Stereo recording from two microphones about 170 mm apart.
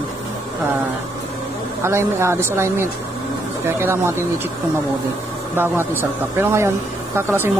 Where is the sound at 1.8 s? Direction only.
15° right (ahead or behind).